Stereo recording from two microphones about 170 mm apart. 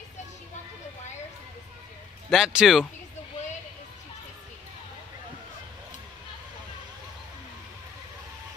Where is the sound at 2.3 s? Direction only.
5° right (ahead or behind).